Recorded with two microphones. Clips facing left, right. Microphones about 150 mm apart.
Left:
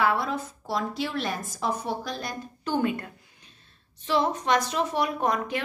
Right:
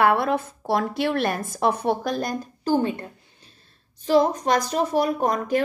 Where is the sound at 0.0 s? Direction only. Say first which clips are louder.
Right 6 dB; 60° right (ahead or behind).